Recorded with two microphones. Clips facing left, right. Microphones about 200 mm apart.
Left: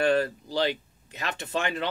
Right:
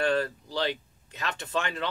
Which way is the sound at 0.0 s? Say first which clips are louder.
Left 3 dB; 10° left (ahead or behind).